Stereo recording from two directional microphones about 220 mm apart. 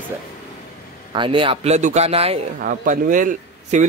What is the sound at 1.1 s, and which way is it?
A man's voice, 20° right (ahead or behind).